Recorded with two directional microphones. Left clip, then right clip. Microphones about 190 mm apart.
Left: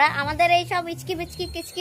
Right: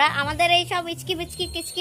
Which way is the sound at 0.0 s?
Centre (ahead or behind).